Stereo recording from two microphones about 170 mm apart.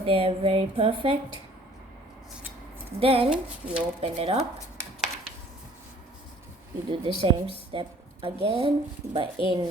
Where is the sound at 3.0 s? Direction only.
35° right (ahead or behind).